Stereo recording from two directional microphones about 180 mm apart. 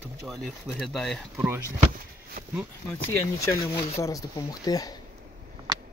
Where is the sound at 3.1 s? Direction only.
15° left (ahead or behind).